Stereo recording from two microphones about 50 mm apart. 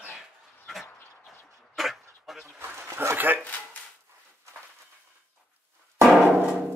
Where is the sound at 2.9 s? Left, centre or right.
Right.